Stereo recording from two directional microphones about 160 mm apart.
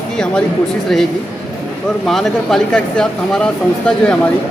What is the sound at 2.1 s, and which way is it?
Speech, centre (ahead or behind).